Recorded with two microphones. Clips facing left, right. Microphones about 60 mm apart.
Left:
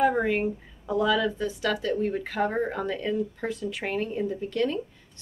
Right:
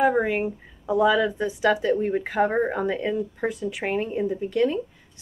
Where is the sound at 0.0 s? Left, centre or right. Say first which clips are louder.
Right 2 dB; centre.